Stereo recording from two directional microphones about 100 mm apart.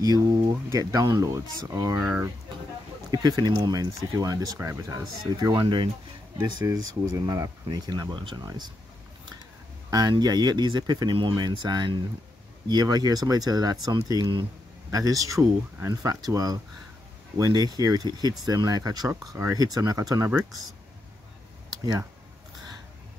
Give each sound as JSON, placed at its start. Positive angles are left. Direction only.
{"t": 0.0, "sound": "speech", "side_deg": -40}
{"t": 3.1, "sound": "speech", "side_deg": -40}
{"t": 5.4, "sound": "speech", "side_deg": -50}
{"t": 6.6, "sound": "speech", "side_deg": -35}
{"t": 9.8, "sound": "speech", "side_deg": -40}